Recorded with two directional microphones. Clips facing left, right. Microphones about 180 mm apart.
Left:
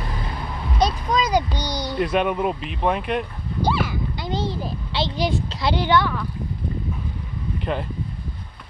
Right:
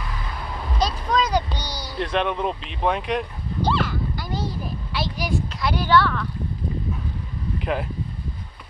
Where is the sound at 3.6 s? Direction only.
10° left (ahead or behind).